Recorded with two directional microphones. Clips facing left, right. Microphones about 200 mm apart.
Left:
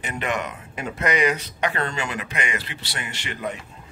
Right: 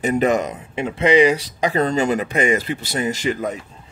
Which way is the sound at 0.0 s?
40° right (ahead or behind).